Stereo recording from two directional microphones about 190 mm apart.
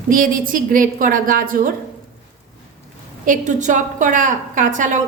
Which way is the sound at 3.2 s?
40° right (ahead or behind).